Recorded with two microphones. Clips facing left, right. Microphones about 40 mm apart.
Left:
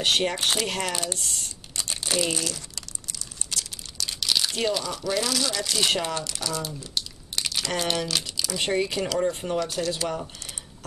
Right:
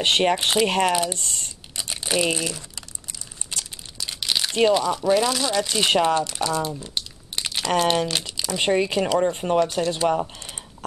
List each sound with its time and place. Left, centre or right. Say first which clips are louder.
0.0 s speech: right 4 dB; right
0.9 s speech: right 7 dB; right
2.0 s crumpling: right 4 dB; centre
6.8 s speech: right 1 dB; right